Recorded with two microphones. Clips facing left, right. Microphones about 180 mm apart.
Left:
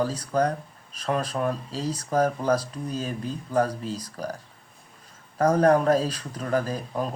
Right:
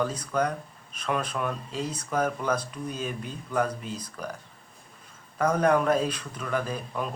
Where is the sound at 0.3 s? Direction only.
35° left (ahead or behind).